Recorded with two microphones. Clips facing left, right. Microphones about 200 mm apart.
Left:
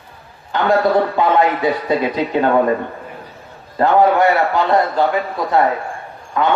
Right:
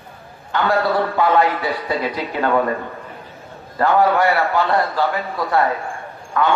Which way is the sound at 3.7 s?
20° left (ahead or behind).